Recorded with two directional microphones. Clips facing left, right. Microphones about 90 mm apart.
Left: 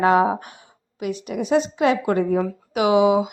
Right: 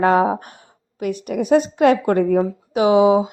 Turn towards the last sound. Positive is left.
turn(degrees=-30)  # may be behind; listen again after turning